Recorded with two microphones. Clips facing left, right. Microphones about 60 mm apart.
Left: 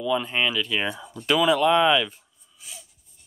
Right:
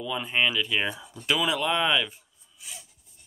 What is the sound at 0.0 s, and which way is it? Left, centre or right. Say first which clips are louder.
Speech: left 3 dB; centre.